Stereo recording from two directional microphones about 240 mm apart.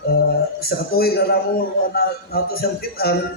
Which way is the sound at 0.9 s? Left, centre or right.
Left.